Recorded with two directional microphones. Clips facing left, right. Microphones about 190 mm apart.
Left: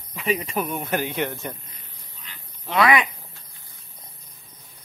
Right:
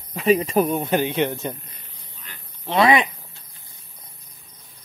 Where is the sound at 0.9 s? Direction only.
20° right (ahead or behind).